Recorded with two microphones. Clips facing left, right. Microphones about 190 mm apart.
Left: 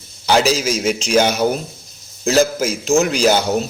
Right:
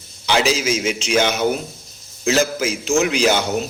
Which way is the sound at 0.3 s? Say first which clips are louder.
Left 3 dB; 40° left (ahead or behind).